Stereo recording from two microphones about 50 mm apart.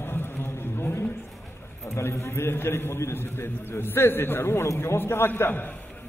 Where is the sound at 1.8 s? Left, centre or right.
Left.